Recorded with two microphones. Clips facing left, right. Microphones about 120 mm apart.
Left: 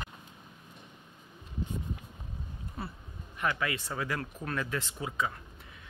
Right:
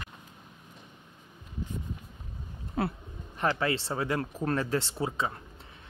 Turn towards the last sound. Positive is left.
turn(degrees=-30)  # may be behind; listen again after turning